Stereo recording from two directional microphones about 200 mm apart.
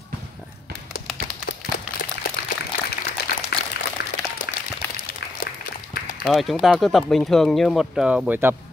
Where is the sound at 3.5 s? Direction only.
50° left (ahead or behind).